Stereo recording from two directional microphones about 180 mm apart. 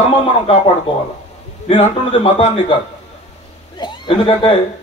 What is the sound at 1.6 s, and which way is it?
Speech, 35° left (ahead or behind).